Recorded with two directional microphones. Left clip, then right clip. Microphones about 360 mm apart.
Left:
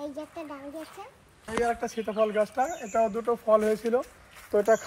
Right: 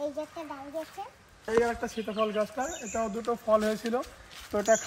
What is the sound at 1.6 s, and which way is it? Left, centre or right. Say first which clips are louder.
Speech: left 3 dB; centre.